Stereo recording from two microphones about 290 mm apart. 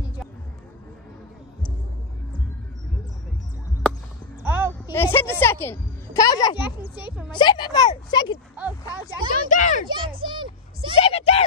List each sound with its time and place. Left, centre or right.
4.4 s a sound: centre
4.9 s a woman's voice: centre
8.5 s speech: centre
9.3 s a child's voice: left
9.8 s a child's voice: centre
11.0 s a sound: left